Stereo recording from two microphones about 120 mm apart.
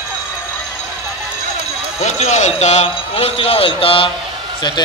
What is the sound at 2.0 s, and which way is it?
Speech, 80° left.